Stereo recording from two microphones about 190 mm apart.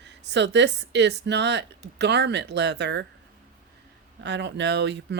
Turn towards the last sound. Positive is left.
turn(degrees=-65)  # may be behind; listen again after turning